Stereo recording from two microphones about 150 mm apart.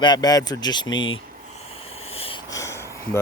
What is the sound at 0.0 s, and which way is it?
Speech, 30° left (ahead or behind).